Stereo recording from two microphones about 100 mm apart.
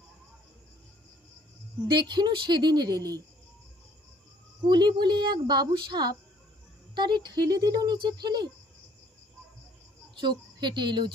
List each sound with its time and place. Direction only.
1.9 s speech: 50° right (ahead or behind)
4.6 s speech: 50° right (ahead or behind)
10.2 s speech: 50° right (ahead or behind)